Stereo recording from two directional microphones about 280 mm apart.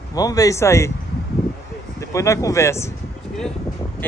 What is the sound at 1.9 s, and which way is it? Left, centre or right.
Speech, centre.